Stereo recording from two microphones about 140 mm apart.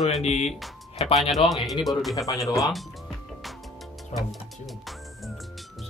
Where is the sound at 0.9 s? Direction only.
50° left (ahead or behind).